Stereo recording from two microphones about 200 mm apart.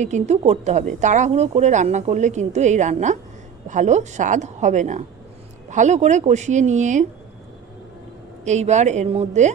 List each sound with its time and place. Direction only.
0.0 s a woman's voice: 35° right (ahead or behind)
8.5 s a woman's voice: 35° right (ahead or behind)